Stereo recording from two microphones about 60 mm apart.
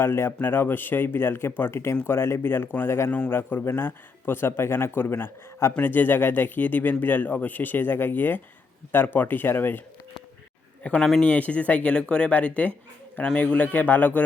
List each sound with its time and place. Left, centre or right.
0.0 s speech: left
5.7 s speech: left
10.8 s speech: left